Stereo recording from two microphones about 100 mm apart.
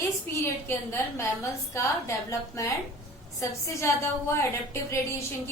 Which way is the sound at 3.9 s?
30° left (ahead or behind).